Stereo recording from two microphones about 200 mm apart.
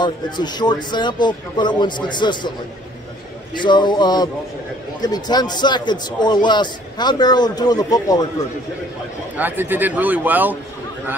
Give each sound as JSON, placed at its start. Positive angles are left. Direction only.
{"t": 0.0, "sound": "a man's voice", "side_deg": 20}
{"t": 3.5, "sound": "a man's voice", "side_deg": 25}
{"t": 9.4, "sound": "a man's voice", "side_deg": -10}